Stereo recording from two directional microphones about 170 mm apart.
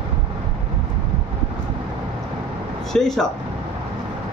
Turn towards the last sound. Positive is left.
turn(degrees=5)  # may be behind; listen again after turning